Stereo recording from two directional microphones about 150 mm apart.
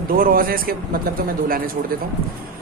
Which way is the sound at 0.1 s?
70° right (ahead or behind).